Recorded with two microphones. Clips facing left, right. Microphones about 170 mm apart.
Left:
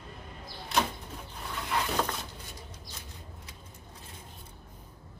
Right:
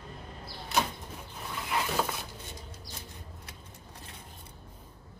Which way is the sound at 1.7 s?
5° right (ahead or behind).